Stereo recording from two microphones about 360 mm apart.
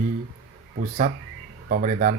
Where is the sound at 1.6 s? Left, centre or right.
Right.